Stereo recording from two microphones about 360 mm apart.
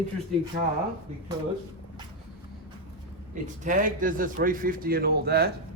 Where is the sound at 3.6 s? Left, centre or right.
Right.